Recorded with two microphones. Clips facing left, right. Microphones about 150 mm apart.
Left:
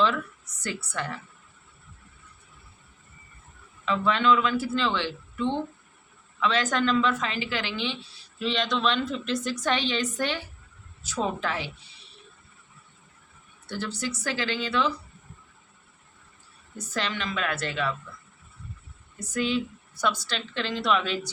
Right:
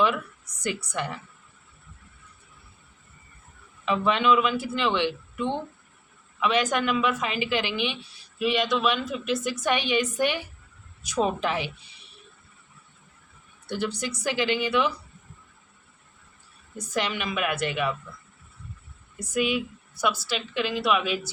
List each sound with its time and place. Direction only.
0.0 s speech: 15° right (ahead or behind)
3.8 s a woman's voice: 15° right (ahead or behind)
13.7 s a woman's voice: 15° right (ahead or behind)
16.9 s a woman's voice: 15° right (ahead or behind)
19.2 s a woman's voice: 15° right (ahead or behind)